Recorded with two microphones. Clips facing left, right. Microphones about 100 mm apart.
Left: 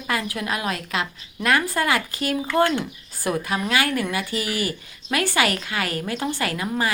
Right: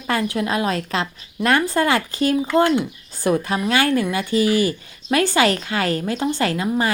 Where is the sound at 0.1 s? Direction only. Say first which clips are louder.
Right 5 dB; 30° right (ahead or behind).